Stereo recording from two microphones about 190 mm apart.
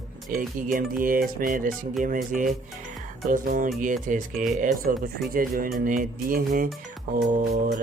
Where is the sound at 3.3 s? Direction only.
45° right (ahead or behind).